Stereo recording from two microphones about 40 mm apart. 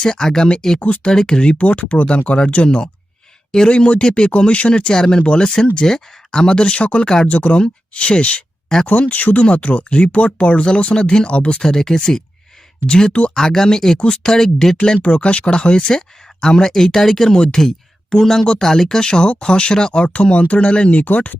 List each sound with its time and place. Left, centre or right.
0.0 s speech: centre
0.8 s speech: left
1.0 s speech: centre; by 2.4 s left
3.7 s speech: left
9.4 s speech: left
11.6 s speech: centre
13.3 s speech: centre
15.0 s speech: left; by 17.3 s centre
17.3 s speech: left
17.6 s speech: centre; by 21.0 s left
21.0 s speech: left